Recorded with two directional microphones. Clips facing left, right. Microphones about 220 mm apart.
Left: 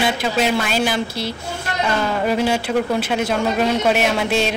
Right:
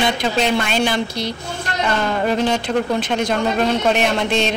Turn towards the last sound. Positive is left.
turn(degrees=5)  # may be behind; listen again after turning